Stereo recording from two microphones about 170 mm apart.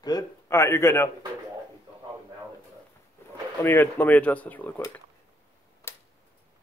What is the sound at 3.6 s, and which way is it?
Speech, 10° left (ahead or behind).